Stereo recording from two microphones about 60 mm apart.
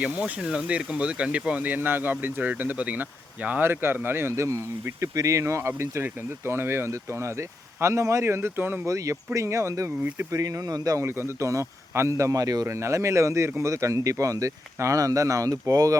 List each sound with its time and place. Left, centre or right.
0.0 s speech: right
3.6 s speech: right
8.9 s speech: right
10.3 s speech: right
11.0 s speech: right
12.6 s speech: right